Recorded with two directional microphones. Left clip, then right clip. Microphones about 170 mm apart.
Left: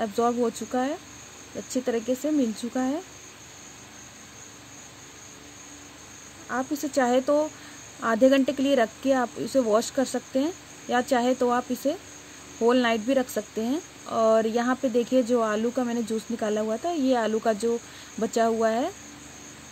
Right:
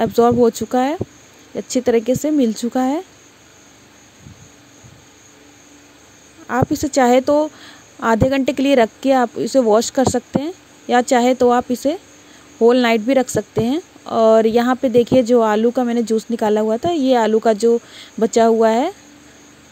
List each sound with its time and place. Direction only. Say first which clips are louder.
0.0 s speech: right 11 dB; 45° right (ahead or behind)
6.5 s speech: right 9 dB; 45° right (ahead or behind)